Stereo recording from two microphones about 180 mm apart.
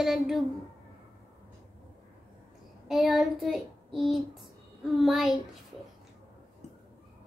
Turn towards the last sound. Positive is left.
turn(degrees=0)  # may be behind; listen again after turning